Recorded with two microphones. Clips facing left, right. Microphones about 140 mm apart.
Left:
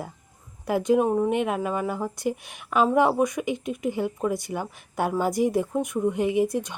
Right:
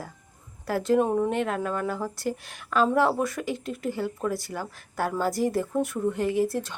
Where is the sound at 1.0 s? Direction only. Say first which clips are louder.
Left 1 dB; 5° left (ahead or behind).